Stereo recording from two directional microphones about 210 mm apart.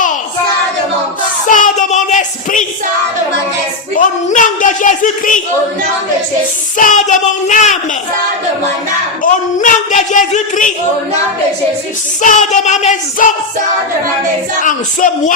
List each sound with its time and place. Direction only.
1.5 s child singing: 40° left (ahead or behind)
3.9 s a woman's voice: 35° left (ahead or behind)
6.7 s a woman's voice: 35° left (ahead or behind)
9.2 s a woman's voice: 40° left (ahead or behind)
12.2 s a woman's voice: 35° left (ahead or behind)
14.6 s a woman's voice: 40° left (ahead or behind)